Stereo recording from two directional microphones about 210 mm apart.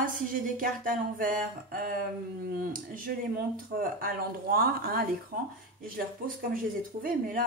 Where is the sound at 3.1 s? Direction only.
45° right (ahead or behind).